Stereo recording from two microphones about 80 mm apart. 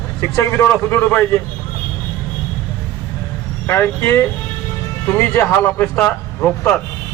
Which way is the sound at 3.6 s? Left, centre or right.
Left.